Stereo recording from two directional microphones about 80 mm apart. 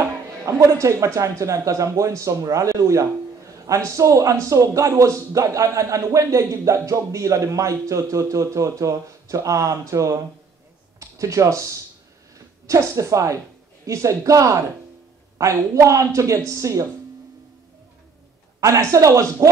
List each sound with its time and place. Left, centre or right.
0.0 s a man's voice: right
18.6 s a man's voice: right